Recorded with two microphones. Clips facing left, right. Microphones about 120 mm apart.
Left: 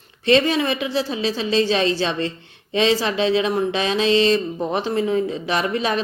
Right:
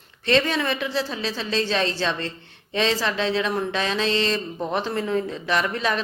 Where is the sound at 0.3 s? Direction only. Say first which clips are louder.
Left 4 dB; 15° left (ahead or behind).